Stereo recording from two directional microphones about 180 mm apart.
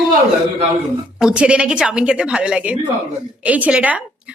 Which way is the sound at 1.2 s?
5° right (ahead or behind).